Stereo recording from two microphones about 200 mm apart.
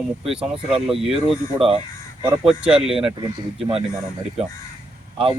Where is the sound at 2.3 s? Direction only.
5° right (ahead or behind).